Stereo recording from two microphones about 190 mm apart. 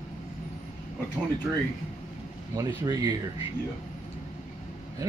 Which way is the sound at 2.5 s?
20° right (ahead or behind).